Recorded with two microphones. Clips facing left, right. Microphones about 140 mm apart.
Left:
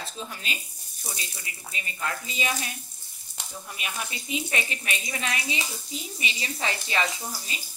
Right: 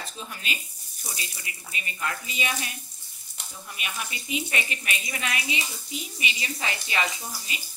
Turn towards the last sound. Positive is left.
turn(degrees=30)  # may be behind; listen again after turning